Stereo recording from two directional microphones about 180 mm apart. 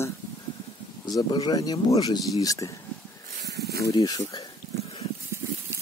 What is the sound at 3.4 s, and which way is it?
Snake, 65° right (ahead or behind).